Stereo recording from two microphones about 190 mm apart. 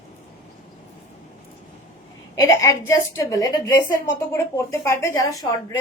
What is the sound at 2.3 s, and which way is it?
A woman's voice, 15° left (ahead or behind).